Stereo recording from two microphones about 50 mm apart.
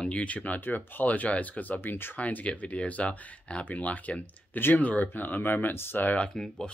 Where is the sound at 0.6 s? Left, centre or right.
Left.